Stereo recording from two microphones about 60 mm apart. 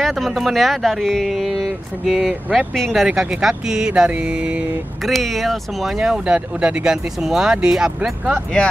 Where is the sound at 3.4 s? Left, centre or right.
Centre.